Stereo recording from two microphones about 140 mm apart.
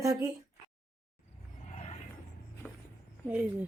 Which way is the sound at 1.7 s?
50° left (ahead or behind).